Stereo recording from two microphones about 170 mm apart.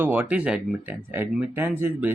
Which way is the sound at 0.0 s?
10° right (ahead or behind).